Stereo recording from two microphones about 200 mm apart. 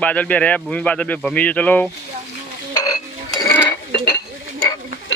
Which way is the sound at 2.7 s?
15° left (ahead or behind).